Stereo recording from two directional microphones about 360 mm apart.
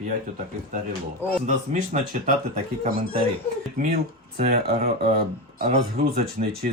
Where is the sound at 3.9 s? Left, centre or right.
Right.